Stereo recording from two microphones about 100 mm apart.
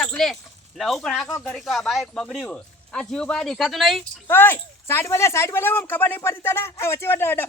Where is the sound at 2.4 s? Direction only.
10° left (ahead or behind).